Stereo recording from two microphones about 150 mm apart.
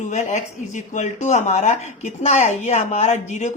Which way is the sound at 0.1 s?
50° left (ahead or behind).